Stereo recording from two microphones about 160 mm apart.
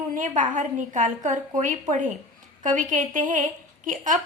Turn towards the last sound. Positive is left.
turn(degrees=-55)  # may be behind; listen again after turning